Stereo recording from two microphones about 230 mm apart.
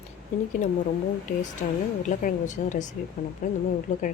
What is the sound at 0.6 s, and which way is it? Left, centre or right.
Speech, left.